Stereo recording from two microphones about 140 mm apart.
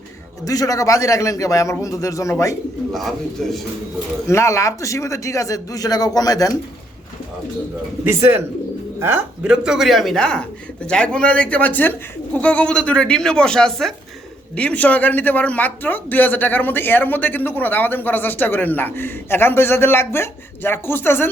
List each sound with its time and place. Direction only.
0.4 s speech: 25° left (ahead or behind)
2.9 s speech: centre (ahead or behind)
4.3 s speech: 20° left (ahead or behind)
8.0 s a man's voice: 15° right (ahead or behind); by 21.2 s 15° left (ahead or behind)